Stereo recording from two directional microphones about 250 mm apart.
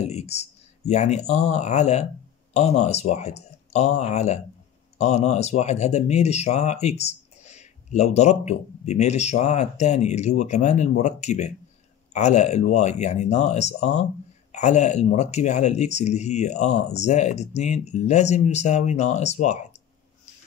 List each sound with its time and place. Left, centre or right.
0.0 s speech: left